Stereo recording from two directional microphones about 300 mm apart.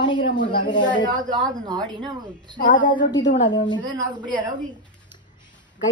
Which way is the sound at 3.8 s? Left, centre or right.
Centre.